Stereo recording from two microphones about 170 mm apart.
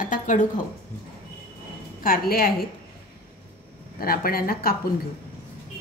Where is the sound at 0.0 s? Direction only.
50° left (ahead or behind).